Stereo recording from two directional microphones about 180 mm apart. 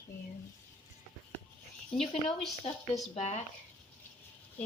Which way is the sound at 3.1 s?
40° left (ahead or behind).